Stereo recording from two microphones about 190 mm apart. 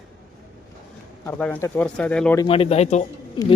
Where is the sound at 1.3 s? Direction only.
10° left (ahead or behind).